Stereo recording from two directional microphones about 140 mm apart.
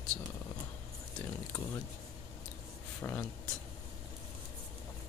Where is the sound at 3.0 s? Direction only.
20° left (ahead or behind).